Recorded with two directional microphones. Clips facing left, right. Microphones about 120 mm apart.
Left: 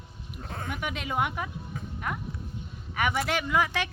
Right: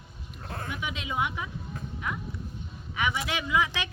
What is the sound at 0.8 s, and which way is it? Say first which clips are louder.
Speech: left 2 dB; 50° left (ahead or behind).